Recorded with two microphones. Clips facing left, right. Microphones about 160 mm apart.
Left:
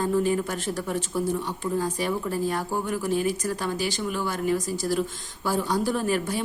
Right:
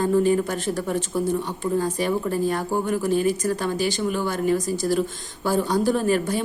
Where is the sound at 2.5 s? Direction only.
5° left (ahead or behind).